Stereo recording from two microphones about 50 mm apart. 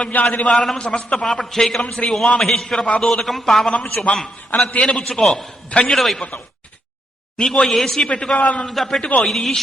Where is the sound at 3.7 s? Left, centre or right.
Left.